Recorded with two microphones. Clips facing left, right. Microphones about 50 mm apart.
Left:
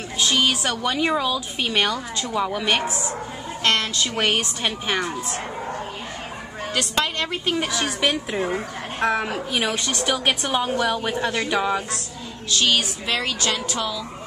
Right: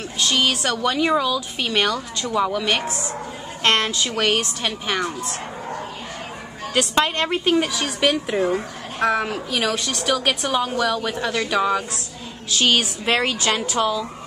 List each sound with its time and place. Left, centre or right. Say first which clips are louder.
0.2 s a woman's voice: even; centre
3.6 s a woman's voice: right 2 dB; right
4.1 s speech: even; centre
6.7 s a woman's voice: right 4 dB; right
7.5 s a woman's voice: right 3 dB; centre
8.4 s speech: right 4 dB; left
9.0 s speech: right 2 dB; centre
10.6 s speech: right 1 dB; left
12.6 s a woman's voice: right 4 dB; right